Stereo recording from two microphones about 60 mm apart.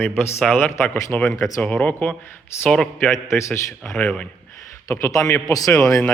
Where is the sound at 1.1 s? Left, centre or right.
Left.